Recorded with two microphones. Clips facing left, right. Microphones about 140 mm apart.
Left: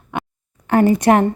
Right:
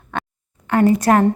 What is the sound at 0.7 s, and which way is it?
Speech, 25° left (ahead or behind).